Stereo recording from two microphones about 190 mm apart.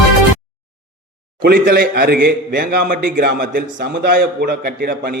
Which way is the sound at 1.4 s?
55° right (ahead or behind).